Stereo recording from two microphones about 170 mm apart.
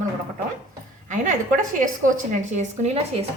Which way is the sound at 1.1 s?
50° right (ahead or behind).